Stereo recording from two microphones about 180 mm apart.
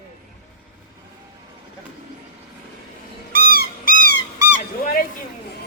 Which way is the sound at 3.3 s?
55° right (ahead or behind).